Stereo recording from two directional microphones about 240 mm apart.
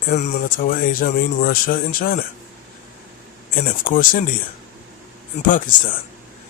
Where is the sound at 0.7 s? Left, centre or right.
Left.